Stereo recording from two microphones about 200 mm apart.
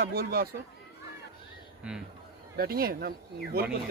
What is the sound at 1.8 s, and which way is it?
Speech, 5° right (ahead or behind).